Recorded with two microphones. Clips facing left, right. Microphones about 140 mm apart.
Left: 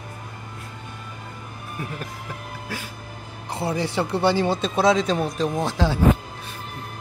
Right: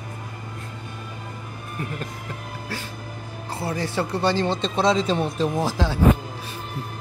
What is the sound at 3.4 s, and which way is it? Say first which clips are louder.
Speech: left 2 dB; 15° left (ahead or behind).